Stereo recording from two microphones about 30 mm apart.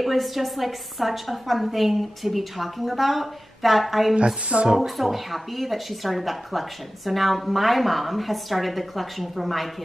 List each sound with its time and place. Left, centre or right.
0.0 s a woman's voice: centre
4.5 s speech: right
4.7 s a woman's voice: centre